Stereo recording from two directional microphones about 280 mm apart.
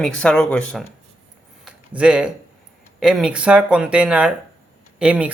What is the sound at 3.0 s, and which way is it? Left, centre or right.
Speech, centre.